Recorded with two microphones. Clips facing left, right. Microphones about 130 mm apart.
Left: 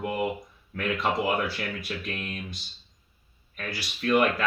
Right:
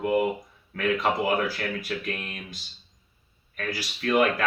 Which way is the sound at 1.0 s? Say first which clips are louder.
Left 1 dB; 50° right (ahead or behind).